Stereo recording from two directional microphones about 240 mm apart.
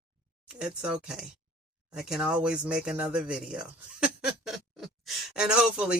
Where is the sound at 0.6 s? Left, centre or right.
Centre.